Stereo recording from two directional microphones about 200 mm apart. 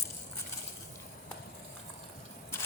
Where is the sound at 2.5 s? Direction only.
15° left (ahead or behind).